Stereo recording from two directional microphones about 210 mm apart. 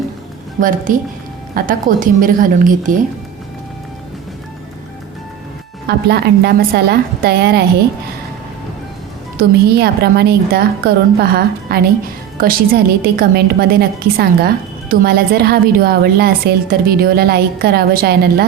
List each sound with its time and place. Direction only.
0.6 s a woman's voice: 40° right (ahead or behind)
5.9 s a woman's voice: 50° right (ahead or behind)
9.4 s a woman's voice: 50° right (ahead or behind)